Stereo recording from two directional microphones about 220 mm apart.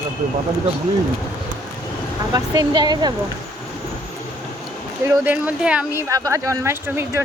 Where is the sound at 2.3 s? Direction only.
20° right (ahead or behind).